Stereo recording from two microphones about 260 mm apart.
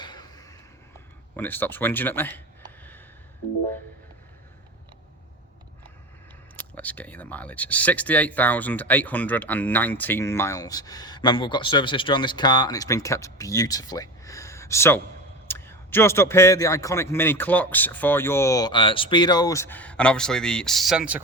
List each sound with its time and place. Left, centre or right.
0.0 s a sound: centre
1.4 s speech: centre
6.6 s speech: centre